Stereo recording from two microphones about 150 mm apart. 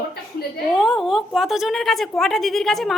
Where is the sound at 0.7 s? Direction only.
Centre (ahead or behind).